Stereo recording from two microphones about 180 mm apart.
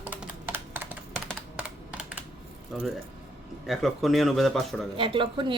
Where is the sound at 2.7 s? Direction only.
Centre (ahead or behind).